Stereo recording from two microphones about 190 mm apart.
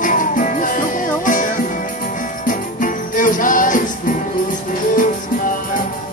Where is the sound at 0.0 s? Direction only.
45° left (ahead or behind).